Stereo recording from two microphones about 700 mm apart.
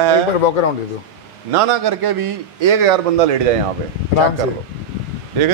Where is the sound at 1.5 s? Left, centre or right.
Right.